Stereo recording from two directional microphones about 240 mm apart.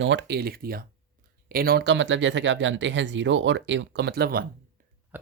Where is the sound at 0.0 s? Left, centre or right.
Right.